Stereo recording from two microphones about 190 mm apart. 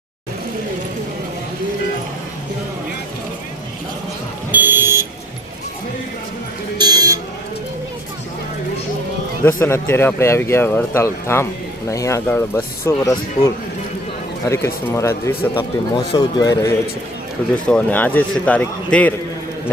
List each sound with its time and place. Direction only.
4.5 s vehicle: 10° right (ahead or behind)
6.7 s buzzer: 20° right (ahead or behind)
9.4 s a man's voice: 15° left (ahead or behind)
17.5 s speech: 5° left (ahead or behind)